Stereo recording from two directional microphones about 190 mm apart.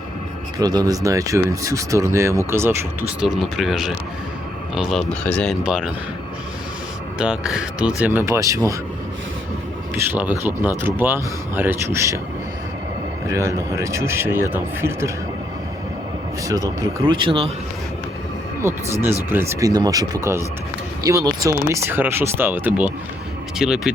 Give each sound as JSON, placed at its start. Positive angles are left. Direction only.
{"t": 0.6, "sound": "speech", "side_deg": -20}
{"t": 5.6, "sound": "speech", "side_deg": -5}
{"t": 7.2, "sound": "speech", "side_deg": -5}
{"t": 9.9, "sound": "speech", "side_deg": -10}
{"t": 13.2, "sound": "speech", "side_deg": -15}
{"t": 16.4, "sound": "speech", "side_deg": -20}
{"t": 18.6, "sound": "speech", "side_deg": -15}